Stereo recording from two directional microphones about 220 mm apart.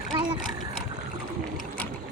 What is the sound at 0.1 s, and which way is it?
Splash, 25° right (ahead or behind).